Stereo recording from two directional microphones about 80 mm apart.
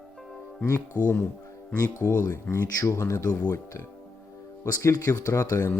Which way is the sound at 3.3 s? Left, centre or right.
Left.